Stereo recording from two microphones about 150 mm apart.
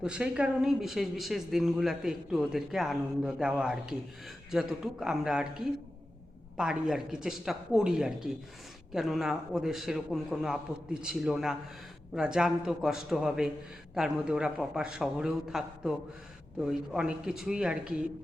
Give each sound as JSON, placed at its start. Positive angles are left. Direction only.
{"t": 0.0, "sound": "speech", "side_deg": -5}